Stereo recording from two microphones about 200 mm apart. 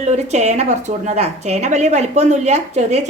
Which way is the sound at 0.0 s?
35° right (ahead or behind).